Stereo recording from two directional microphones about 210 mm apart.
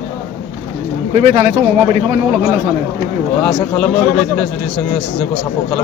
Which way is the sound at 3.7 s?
5° left (ahead or behind).